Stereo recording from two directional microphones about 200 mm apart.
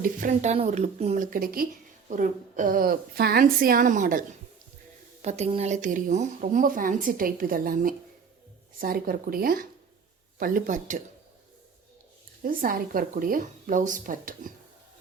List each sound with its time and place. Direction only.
0.0 s a woman's voice: 40° right (ahead or behind)
12.4 s a woman's voice: 45° right (ahead or behind)